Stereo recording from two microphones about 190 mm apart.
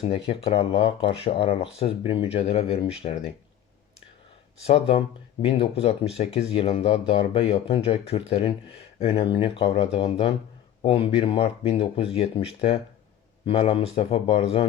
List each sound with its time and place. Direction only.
0.0 s speech: 30° left (ahead or behind)
4.6 s speech: 30° left (ahead or behind)